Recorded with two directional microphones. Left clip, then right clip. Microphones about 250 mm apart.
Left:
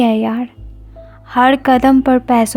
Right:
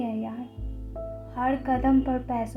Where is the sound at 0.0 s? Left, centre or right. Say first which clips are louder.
Left 18 dB; left.